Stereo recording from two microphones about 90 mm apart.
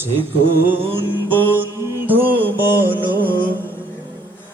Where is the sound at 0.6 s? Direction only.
20° right (ahead or behind).